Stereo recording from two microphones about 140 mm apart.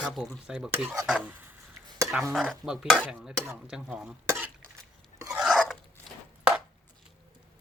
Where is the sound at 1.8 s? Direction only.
30° right (ahead or behind).